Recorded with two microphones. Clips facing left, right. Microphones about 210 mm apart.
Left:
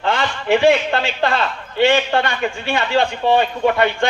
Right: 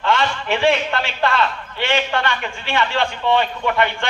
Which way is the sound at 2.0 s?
35° left (ahead or behind).